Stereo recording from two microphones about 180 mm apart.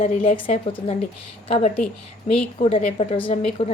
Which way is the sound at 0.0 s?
40° left (ahead or behind).